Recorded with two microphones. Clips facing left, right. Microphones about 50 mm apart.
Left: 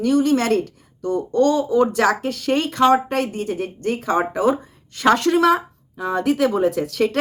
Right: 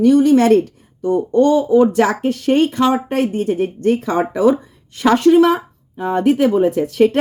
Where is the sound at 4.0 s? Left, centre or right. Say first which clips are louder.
Even; left.